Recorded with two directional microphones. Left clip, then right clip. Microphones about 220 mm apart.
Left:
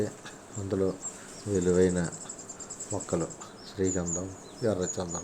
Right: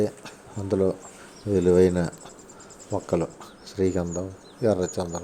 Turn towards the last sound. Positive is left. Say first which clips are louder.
# right 6 dB
turn(degrees=-30)  # may be behind; listen again after turning